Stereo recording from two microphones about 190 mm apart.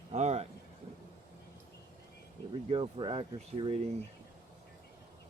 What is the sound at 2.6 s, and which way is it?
Speech, 30° right (ahead or behind).